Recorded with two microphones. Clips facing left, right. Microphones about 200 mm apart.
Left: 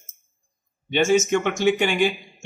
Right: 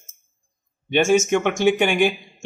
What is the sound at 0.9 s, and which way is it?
Speech, 50° right (ahead or behind).